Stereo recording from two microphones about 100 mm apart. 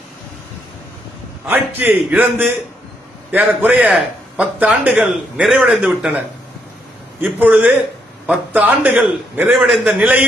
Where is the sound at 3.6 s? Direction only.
15° right (ahead or behind).